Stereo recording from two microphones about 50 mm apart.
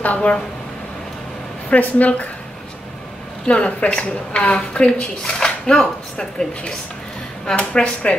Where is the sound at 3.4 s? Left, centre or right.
Left.